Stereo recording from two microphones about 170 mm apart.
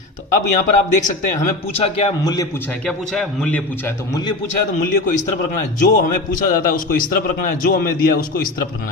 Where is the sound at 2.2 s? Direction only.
25° left (ahead or behind).